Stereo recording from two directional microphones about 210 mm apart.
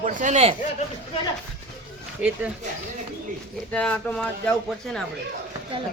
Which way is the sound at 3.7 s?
5° left (ahead or behind).